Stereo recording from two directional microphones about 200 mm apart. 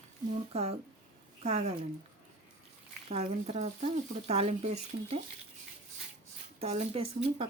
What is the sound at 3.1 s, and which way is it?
Speech, 30° right (ahead or behind).